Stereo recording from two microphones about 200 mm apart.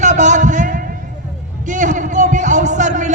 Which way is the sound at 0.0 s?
35° right (ahead or behind).